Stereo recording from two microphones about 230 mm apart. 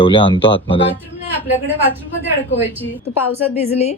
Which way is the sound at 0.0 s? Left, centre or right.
Left.